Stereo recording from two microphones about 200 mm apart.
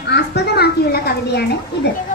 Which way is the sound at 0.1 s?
55° left (ahead or behind).